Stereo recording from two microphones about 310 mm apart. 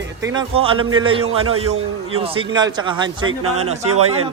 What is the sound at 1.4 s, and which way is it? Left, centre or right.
Speech, right.